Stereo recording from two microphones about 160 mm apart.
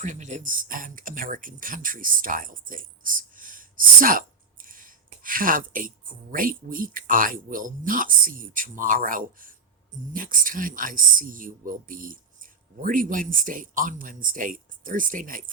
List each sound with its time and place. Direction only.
0.0 s speech: 50° right (ahead or behind)